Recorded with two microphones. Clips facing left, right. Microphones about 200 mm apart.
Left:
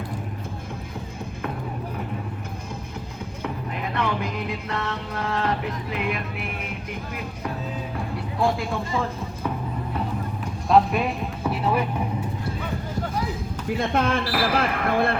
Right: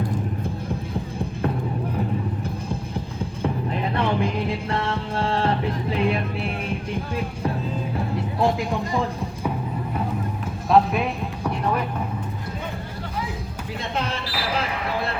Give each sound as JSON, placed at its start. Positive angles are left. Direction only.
{"t": 3.9, "sound": "music", "side_deg": -30}
{"t": 8.4, "sound": "speech", "side_deg": -20}
{"t": 10.7, "sound": "music", "side_deg": 0}
{"t": 13.7, "sound": "speech", "side_deg": 50}